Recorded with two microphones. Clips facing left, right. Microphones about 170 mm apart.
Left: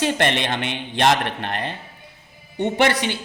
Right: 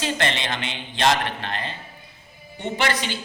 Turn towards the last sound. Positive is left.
turn(degrees=65)  # may be behind; listen again after turning